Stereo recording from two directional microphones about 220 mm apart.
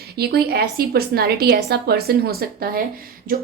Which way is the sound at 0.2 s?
45° right (ahead or behind).